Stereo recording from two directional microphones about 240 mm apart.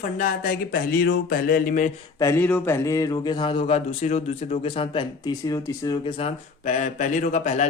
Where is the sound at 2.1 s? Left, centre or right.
Centre.